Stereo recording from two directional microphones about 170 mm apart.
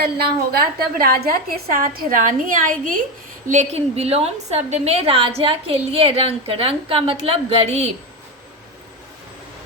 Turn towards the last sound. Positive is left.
turn(degrees=-35)  # may be behind; listen again after turning